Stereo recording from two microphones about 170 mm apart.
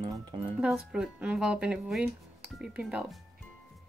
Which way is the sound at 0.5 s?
5° right (ahead or behind).